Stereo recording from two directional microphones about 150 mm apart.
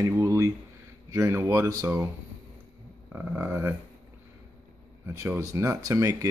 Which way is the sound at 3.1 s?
10° right (ahead or behind).